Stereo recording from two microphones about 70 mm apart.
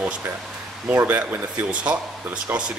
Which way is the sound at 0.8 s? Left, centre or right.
Right.